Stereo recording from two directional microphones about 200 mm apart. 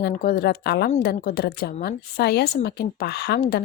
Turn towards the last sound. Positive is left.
turn(degrees=50)  # may be behind; listen again after turning